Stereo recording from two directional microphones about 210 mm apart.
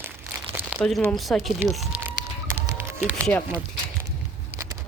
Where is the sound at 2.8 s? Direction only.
10° right (ahead or behind).